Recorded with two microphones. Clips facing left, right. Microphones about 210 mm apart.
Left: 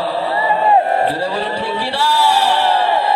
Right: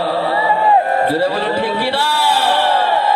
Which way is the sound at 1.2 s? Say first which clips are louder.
Right 4 dB; 65° right (ahead or behind).